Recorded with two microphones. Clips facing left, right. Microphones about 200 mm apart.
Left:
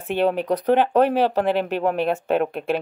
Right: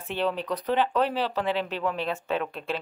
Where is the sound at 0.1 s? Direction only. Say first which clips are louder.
Left 8 dB; 55° left (ahead or behind).